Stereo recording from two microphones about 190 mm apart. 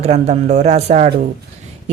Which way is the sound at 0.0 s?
35° right (ahead or behind).